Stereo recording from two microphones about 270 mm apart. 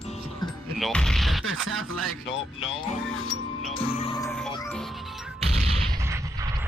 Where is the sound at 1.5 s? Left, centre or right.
Right.